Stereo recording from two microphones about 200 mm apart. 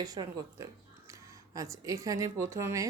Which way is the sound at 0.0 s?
20° right (ahead or behind).